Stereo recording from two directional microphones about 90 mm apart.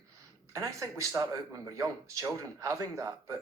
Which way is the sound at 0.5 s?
35° right (ahead or behind).